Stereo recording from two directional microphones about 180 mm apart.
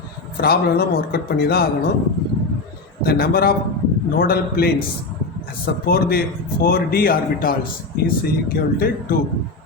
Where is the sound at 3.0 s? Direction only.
60° left (ahead or behind).